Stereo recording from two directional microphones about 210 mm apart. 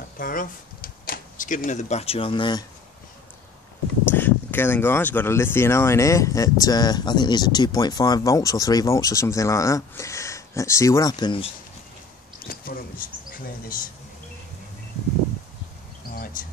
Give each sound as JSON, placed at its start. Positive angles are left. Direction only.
{"t": 0.2, "sound": "speech", "side_deg": 40}
{"t": 4.1, "sound": "speech", "side_deg": 10}
{"t": 12.4, "sound": "a sound", "side_deg": 45}